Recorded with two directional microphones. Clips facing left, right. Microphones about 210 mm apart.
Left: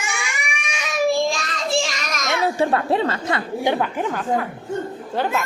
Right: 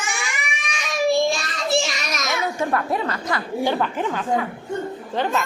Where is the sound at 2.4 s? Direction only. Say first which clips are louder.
Left 5 dB; 30° left (ahead or behind).